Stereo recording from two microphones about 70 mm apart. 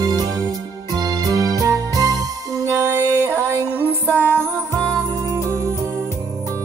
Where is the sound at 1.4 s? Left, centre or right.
Right.